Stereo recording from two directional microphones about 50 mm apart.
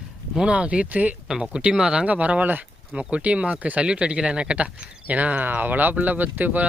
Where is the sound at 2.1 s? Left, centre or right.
Right.